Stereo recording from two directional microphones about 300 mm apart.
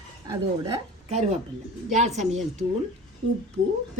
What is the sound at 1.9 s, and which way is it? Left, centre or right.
Speech, right.